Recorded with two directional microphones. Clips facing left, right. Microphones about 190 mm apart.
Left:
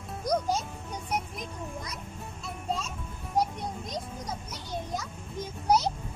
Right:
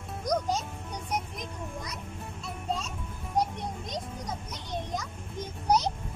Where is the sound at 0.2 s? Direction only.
5° left (ahead or behind).